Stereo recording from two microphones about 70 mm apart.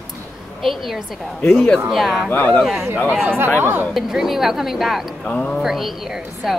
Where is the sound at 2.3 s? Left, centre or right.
Left.